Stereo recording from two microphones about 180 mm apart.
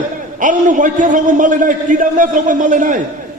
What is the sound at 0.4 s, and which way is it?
A man's voice, 45° right (ahead or behind).